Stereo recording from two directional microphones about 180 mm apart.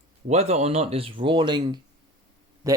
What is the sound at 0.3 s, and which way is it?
Speech, 35° right (ahead or behind).